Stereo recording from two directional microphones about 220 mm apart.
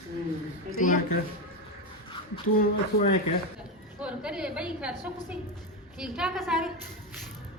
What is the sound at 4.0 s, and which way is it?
A woman's voice, 5° right (ahead or behind).